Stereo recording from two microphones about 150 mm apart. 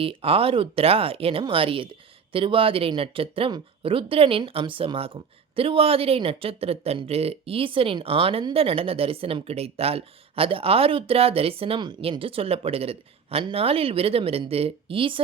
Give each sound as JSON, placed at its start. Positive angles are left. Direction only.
{"t": 0.0, "sound": "speech", "side_deg": -40}